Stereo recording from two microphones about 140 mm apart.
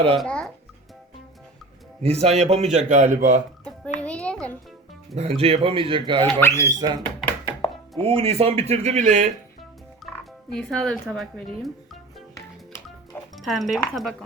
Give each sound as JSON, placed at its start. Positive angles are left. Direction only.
{"t": 0.2, "sound": "a child's voice", "side_deg": 5}
{"t": 2.0, "sound": "speech", "side_deg": -45}
{"t": 4.0, "sound": "music", "side_deg": 10}
{"t": 5.1, "sound": "speech", "side_deg": -45}
{"t": 6.4, "sound": "speech", "side_deg": 20}
{"t": 6.7, "sound": "speech", "side_deg": -25}
{"t": 7.5, "sound": "chopping", "side_deg": -5}
{"t": 8.0, "sound": "speech", "side_deg": -45}
{"t": 10.0, "sound": "music", "side_deg": 0}
{"t": 10.5, "sound": "a woman's voice", "side_deg": 5}
{"t": 13.3, "sound": "a woman's voice", "side_deg": 0}